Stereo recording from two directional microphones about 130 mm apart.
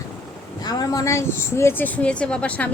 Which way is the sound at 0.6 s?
30° left (ahead or behind).